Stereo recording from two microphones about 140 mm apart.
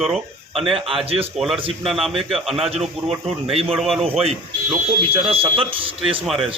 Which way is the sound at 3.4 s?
45° right (ahead or behind).